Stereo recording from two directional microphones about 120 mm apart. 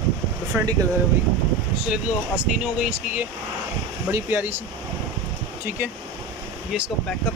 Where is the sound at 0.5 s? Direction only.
15° right (ahead or behind).